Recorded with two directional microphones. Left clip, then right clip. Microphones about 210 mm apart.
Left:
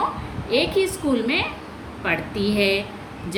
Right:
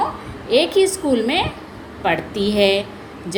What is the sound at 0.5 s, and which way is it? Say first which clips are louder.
A woman's voice: right 5 dB; 20° right (ahead or behind).